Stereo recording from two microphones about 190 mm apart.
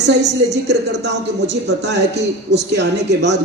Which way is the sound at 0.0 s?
65° right (ahead or behind).